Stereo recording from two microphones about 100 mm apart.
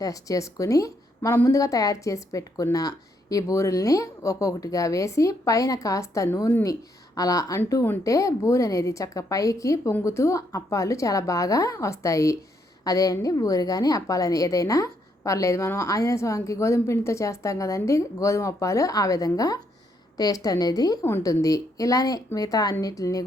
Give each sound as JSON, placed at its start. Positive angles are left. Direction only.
{"t": 0.0, "sound": "a woman's voice", "side_deg": 35}